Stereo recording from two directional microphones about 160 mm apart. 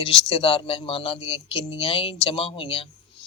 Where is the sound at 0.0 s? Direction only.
30° left (ahead or behind).